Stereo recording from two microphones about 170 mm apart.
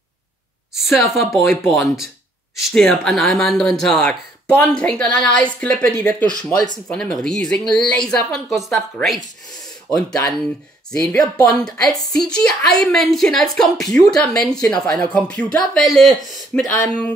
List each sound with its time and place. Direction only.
0.7 s speech: centre (ahead or behind)
6.2 s speech: 25° left (ahead or behind)
6.9 s speech: 5° left (ahead or behind)